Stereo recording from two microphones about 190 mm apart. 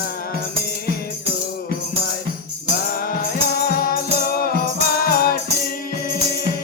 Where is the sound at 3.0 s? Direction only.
50° left (ahead or behind).